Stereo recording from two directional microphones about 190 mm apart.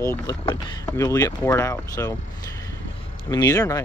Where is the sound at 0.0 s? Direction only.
15° left (ahead or behind).